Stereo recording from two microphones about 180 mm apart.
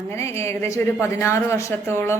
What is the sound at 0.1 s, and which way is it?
A woman's voice, 15° left (ahead or behind).